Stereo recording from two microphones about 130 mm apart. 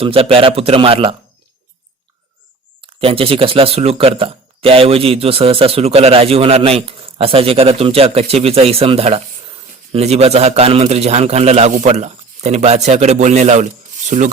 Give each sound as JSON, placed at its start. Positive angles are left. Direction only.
{"t": 0.0, "sound": "speech", "side_deg": -45}
{"t": 2.8, "sound": "speech", "side_deg": -45}
{"t": 11.7, "sound": "speech", "side_deg": -65}